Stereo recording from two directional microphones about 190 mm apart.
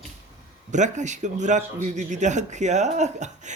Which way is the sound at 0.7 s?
40° right (ahead or behind).